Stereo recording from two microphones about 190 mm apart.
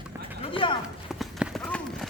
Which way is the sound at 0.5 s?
25° left (ahead or behind).